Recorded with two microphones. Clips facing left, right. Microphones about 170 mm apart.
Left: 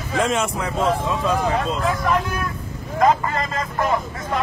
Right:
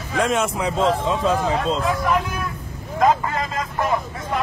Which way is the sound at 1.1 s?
20° right (ahead or behind).